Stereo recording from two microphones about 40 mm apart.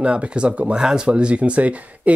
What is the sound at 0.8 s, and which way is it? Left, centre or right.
Speech, centre.